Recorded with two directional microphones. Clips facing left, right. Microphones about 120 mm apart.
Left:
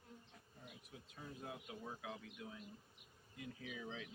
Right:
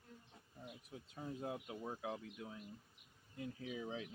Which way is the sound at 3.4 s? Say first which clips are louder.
Right 5 dB; 35° right (ahead or behind).